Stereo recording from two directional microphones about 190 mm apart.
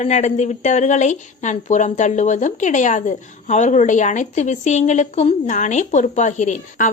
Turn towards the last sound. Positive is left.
turn(degrees=40)  # may be behind; listen again after turning